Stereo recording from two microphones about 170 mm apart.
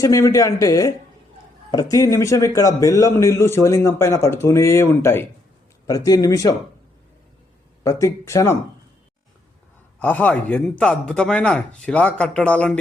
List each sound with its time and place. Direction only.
0.0 s a man's voice: 20° left (ahead or behind)
7.9 s a man's voice: 20° left (ahead or behind)
10.0 s speech: 10° left (ahead or behind)